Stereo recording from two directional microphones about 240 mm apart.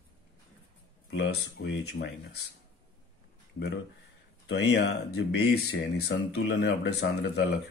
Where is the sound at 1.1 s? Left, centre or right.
Left.